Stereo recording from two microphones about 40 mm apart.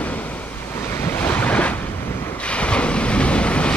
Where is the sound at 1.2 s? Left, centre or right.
Left.